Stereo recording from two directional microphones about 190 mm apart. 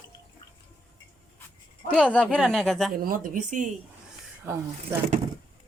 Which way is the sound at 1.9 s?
5° left (ahead or behind).